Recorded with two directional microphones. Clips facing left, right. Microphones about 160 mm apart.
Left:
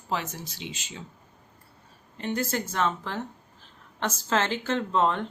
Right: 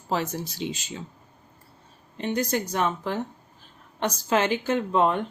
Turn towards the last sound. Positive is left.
turn(degrees=-15)  # may be behind; listen again after turning